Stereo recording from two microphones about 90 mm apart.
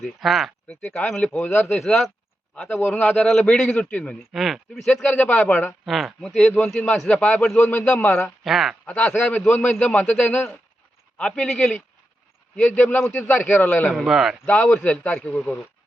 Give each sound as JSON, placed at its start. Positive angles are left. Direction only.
{"t": 0.0, "sound": "a man's voice", "side_deg": 0}
{"t": 1.3, "sound": "a man's voice", "side_deg": 20}
{"t": 1.6, "sound": "speech", "side_deg": 5}
{"t": 3.1, "sound": "a man's voice", "side_deg": 5}
{"t": 4.3, "sound": "speech", "side_deg": 0}
{"t": 5.1, "sound": "a man's voice", "side_deg": 20}
{"t": 5.8, "sound": "a man's voice", "side_deg": 0}
{"t": 8.4, "sound": "speech", "side_deg": -5}
{"t": 8.9, "sound": "a man's voice", "side_deg": 15}
{"t": 13.9, "sound": "speech", "side_deg": 0}
{"t": 14.4, "sound": "a man's voice", "side_deg": 15}